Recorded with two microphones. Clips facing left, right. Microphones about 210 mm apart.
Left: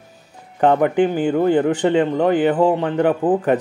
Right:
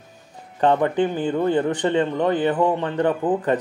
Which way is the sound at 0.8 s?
15° left (ahead or behind).